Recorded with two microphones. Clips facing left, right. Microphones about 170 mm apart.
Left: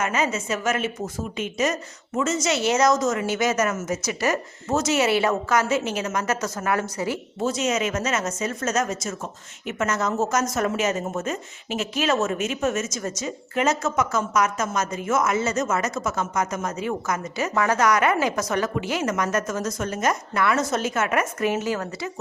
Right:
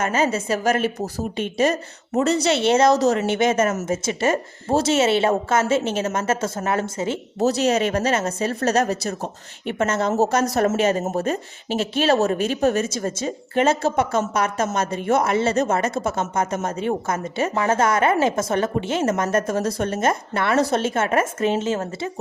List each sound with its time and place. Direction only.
0.0 s a woman's voice: 30° right (ahead or behind)
7.4 s a woman's voice: 35° right (ahead or behind)